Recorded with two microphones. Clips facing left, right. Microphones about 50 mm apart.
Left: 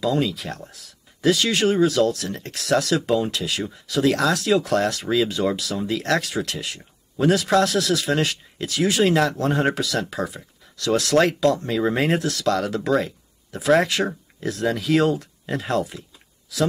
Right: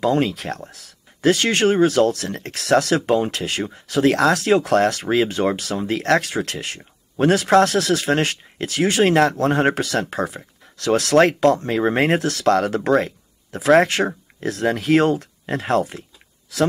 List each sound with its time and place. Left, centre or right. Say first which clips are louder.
0.0 s speech: right 3 dB; right